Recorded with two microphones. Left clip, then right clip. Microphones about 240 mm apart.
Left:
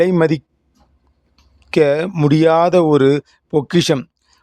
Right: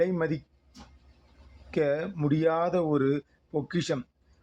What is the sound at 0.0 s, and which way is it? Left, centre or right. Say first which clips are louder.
Speech: left 13 dB; left.